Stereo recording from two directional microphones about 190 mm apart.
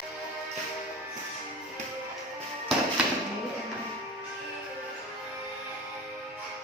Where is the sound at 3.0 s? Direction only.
5° right (ahead or behind).